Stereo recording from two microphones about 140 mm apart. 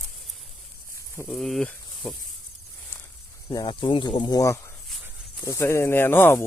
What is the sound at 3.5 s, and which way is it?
Speech, 30° left (ahead or behind).